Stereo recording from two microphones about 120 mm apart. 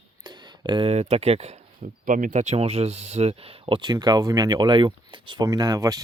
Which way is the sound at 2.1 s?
85° right.